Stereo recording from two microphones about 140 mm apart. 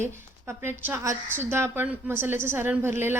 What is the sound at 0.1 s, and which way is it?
A woman's voice, 15° right (ahead or behind).